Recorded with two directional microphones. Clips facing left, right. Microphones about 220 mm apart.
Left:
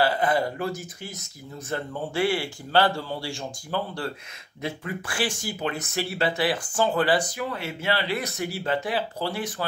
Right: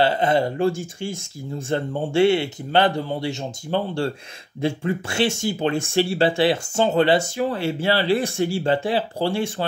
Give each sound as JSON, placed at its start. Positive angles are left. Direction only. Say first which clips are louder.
{"t": 0.0, "sound": "speech", "louder": "right 4 dB", "side_deg": -25}